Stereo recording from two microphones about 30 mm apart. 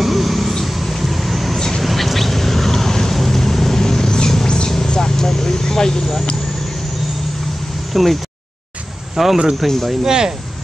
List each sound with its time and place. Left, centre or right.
0.0 s vehicle: centre; by 6.0 s left
7.9 s speech: centre
10.0 s speech: right